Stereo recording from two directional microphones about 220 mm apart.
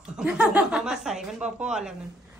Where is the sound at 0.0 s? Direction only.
5° right (ahead or behind).